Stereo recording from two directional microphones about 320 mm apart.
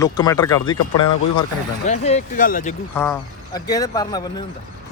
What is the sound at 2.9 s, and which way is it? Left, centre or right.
Speech, centre.